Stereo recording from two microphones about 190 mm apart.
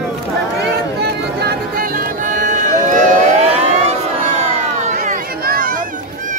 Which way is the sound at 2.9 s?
45° right (ahead or behind).